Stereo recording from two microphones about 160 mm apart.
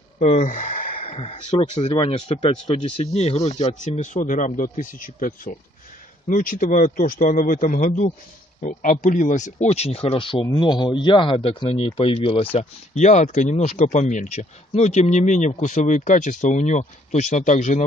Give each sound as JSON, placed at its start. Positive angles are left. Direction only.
{"t": 0.2, "sound": "gasp", "side_deg": 50}
{"t": 1.0, "sound": "a man's voice", "side_deg": 35}
{"t": 12.5, "sound": "speech", "side_deg": 45}